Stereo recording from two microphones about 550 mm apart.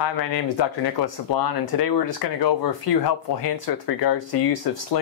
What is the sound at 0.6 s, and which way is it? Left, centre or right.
Speech, left.